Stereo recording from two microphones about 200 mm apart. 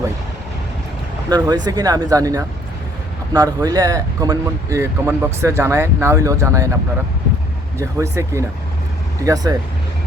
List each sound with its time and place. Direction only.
1.3 s speech: 20° right (ahead or behind)
7.8 s speech: 15° right (ahead or behind)